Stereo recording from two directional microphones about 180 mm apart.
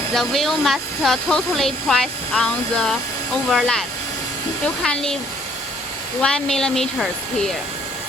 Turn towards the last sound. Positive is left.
turn(degrees=5)  # may be behind; listen again after turning